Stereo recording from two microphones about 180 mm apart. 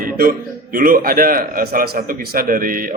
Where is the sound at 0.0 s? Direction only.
50° right (ahead or behind).